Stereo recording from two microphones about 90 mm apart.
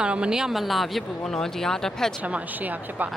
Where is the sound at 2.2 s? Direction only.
15° right (ahead or behind).